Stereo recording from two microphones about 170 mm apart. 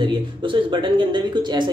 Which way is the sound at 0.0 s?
30° right (ahead or behind).